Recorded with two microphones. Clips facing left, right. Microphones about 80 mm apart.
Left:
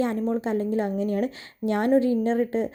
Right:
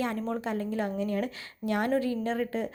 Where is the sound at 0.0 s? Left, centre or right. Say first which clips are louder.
Left 6 dB; left.